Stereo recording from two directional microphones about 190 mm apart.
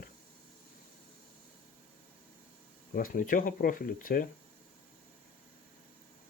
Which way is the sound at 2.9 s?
45° left (ahead or behind).